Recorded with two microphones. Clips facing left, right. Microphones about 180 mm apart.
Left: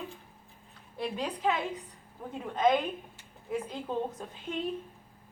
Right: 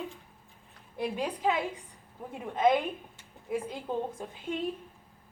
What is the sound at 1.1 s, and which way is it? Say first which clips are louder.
Speech: even; 10° right (ahead or behind).